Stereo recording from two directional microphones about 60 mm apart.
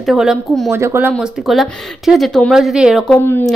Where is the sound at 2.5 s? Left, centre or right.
Centre.